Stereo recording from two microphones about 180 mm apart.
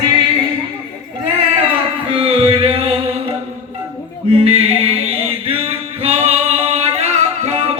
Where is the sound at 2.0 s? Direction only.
30° right (ahead or behind).